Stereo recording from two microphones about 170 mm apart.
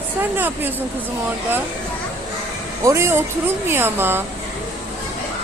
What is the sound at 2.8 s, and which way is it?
Speech, 15° right (ahead or behind).